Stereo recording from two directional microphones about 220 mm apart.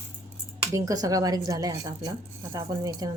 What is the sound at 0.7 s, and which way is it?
A woman's voice, 15° right (ahead or behind).